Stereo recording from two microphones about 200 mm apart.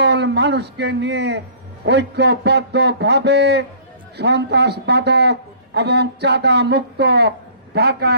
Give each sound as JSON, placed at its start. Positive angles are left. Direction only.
{"t": 0.0, "sound": "a man's voice", "side_deg": -60}